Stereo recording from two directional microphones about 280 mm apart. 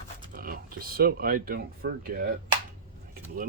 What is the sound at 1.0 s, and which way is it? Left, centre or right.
Speech, right.